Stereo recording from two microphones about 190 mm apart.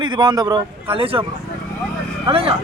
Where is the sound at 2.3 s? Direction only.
30° right (ahead or behind).